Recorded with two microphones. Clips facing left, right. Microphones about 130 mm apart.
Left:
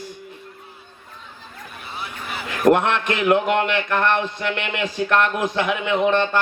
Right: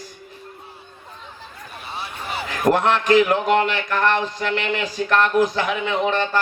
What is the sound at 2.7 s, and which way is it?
A man's voice, 35° right (ahead or behind).